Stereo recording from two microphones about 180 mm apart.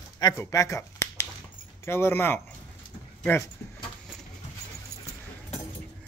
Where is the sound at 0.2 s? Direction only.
15° left (ahead or behind).